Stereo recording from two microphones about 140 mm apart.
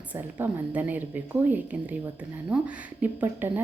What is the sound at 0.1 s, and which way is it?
Speech, 10° right (ahead or behind).